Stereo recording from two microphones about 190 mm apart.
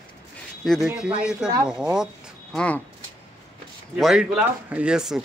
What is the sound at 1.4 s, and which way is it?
Speech, 20° right (ahead or behind).